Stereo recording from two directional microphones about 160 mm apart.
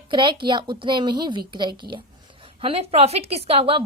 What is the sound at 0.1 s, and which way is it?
A child's voice, 30° right (ahead or behind).